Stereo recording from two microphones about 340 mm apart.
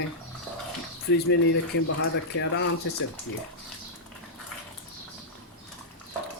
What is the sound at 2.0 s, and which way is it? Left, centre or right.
Speech, left.